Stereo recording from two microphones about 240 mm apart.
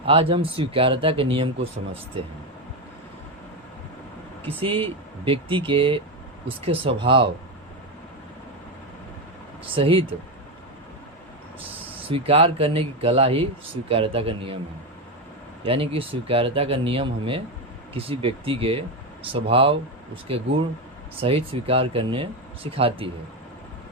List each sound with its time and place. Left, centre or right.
0.0 s speech: right
4.4 s speech: right
9.7 s speech: right
12.0 s speech: right
15.6 s speech: right